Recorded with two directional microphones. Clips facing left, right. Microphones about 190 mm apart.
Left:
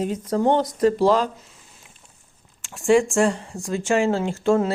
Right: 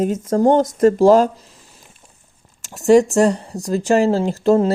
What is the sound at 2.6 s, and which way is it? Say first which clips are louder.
Speech: right 5 dB; 40° right (ahead or behind).